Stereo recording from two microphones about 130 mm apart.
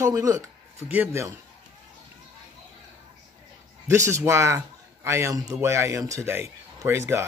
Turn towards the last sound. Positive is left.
turn(degrees=-20)  # may be behind; listen again after turning